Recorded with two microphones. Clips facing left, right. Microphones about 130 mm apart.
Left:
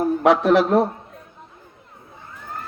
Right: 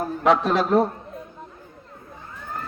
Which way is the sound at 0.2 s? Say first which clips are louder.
Left 2 dB; 70° left (ahead or behind).